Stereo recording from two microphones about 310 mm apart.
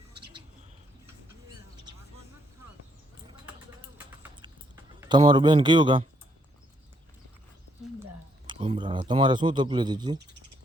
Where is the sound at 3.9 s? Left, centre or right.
Centre.